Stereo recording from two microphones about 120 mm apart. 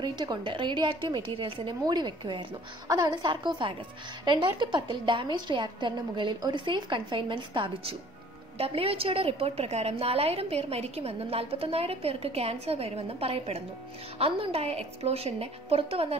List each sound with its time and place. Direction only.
0.0 s a woman's voice: 40° right (ahead or behind); by 16.2 s 55° right (ahead or behind)